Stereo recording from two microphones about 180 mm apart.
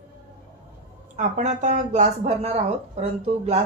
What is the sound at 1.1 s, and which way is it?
Speech, 40° right (ahead or behind).